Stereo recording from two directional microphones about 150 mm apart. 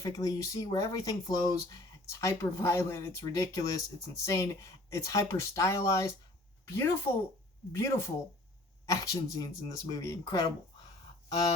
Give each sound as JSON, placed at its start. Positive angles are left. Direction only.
{"t": 0.0, "sound": "speech", "side_deg": 25}